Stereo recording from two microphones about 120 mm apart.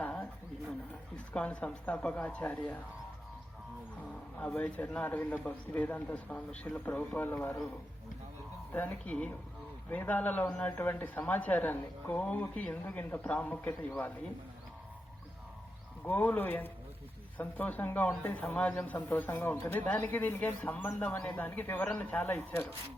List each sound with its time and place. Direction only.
0.0 s a sound: 10° left (ahead or behind)
1.3 s a man's voice: 10° left (ahead or behind)
4.1 s a man's voice: 10° left (ahead or behind)
8.7 s a man's voice: 10° left (ahead or behind)
16.0 s a man's voice: 15° left (ahead or behind)